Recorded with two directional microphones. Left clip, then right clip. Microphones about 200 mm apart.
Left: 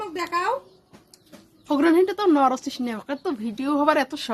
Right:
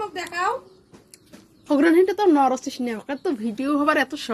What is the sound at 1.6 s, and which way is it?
A woman's voice, centre (ahead or behind).